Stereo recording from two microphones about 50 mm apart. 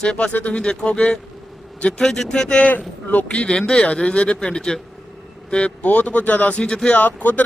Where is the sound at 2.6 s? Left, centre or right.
Left.